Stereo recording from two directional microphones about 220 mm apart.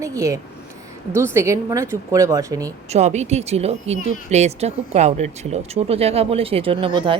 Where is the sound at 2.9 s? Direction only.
30° right (ahead or behind).